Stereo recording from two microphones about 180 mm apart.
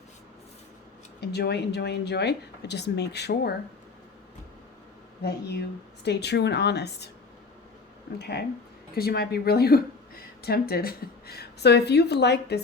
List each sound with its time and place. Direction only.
1.2 s speech: 65° left (ahead or behind)
5.2 s a woman's voice: 65° left (ahead or behind)
8.2 s a woman's voice: 65° left (ahead or behind)